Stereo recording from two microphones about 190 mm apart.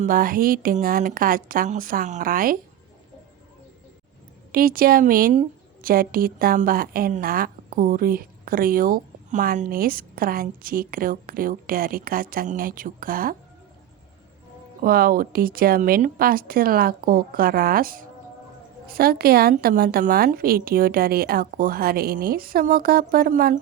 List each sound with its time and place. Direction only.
0.0 s a woman's voice: 45° right (ahead or behind)
4.5 s a woman's voice: 50° right (ahead or behind)
14.8 s a woman's voice: 50° right (ahead or behind)